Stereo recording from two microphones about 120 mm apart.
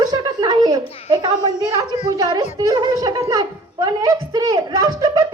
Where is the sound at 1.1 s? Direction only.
40° right (ahead or behind).